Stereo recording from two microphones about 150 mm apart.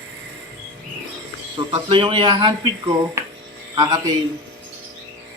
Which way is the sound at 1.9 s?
30° right (ahead or behind).